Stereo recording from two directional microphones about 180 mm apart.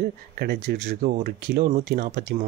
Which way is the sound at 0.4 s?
60° right (ahead or behind).